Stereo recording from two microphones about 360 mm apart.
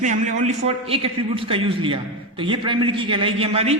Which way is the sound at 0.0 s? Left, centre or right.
Centre.